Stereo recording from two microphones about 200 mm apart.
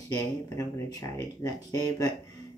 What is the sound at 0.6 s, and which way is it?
Speech, 15° left (ahead or behind).